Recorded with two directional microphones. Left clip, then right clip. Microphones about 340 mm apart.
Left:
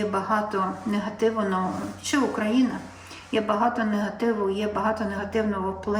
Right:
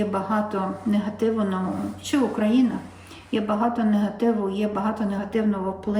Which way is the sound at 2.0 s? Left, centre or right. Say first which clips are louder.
Right 1 dB; centre.